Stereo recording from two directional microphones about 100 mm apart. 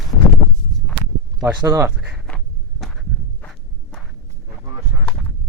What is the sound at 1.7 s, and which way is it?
Speech, 25° right (ahead or behind).